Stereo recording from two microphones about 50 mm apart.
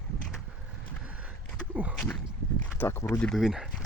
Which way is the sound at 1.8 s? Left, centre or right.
Right.